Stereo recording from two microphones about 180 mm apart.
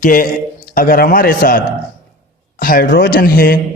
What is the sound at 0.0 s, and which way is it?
A man's voice, 50° left (ahead or behind).